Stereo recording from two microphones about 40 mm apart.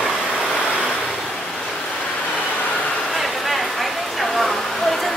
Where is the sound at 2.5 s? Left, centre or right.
Left.